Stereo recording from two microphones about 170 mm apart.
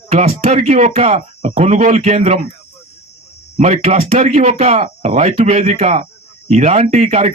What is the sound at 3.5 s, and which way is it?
A man's voice, 40° right (ahead or behind).